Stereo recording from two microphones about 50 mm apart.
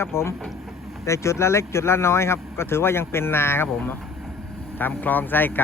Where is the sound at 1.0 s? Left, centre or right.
Left.